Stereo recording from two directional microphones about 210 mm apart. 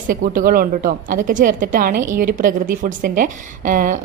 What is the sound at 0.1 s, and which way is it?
A woman's voice, 45° right (ahead or behind).